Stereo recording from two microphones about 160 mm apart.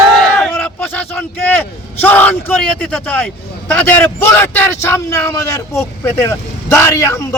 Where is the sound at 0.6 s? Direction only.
5° left (ahead or behind).